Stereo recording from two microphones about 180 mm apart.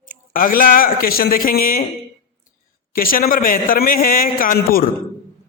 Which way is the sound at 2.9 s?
55° left (ahead or behind).